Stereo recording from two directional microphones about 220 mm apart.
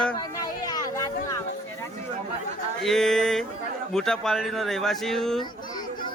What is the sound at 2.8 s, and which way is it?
Speech, centre (ahead or behind).